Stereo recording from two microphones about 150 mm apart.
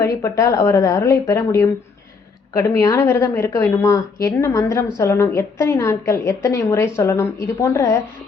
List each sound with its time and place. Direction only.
0.0 s a woman's voice: 20° left (ahead or behind)